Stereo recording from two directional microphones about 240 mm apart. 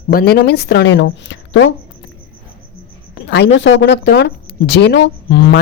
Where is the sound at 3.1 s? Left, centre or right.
Left.